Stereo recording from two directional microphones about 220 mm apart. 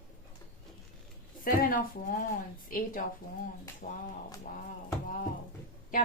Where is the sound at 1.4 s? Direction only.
40° left (ahead or behind).